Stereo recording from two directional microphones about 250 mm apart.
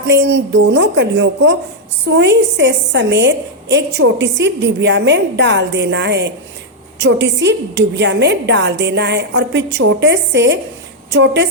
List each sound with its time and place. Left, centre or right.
0.1 s a woman's voice: right